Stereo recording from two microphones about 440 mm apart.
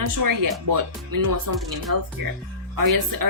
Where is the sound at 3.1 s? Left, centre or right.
Right.